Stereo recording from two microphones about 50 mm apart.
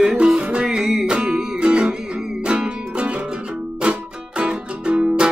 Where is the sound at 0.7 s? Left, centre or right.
Centre.